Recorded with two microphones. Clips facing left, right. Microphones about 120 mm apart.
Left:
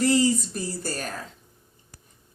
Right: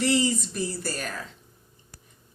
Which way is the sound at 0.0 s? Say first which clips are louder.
Left 3 dB; 40° left (ahead or behind).